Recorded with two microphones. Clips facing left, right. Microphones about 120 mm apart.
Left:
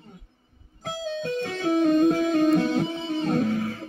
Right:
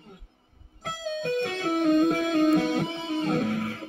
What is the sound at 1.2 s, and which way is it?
Music, 60° right (ahead or behind).